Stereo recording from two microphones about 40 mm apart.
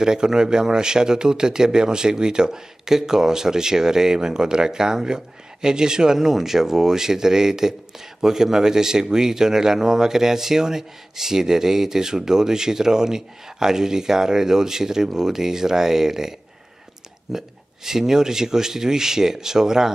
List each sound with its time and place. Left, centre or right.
0.0 s speech: centre